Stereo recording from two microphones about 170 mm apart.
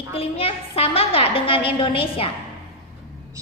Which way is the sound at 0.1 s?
35° left (ahead or behind).